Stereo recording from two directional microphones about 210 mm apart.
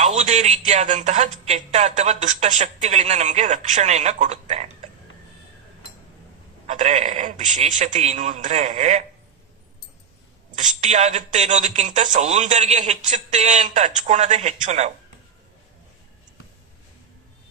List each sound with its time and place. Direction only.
0.2 s speech: 35° right (ahead or behind)
6.7 s speech: 35° right (ahead or behind)
10.5 s speech: 35° right (ahead or behind)